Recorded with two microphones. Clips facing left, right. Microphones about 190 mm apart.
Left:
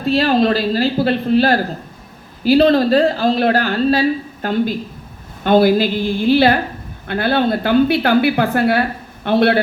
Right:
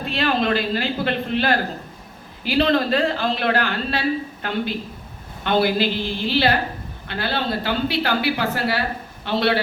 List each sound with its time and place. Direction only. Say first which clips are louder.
0.0 s a man's voice: left 7 dB; 40° left (ahead or behind); by 9.6 s 55° left (ahead or behind)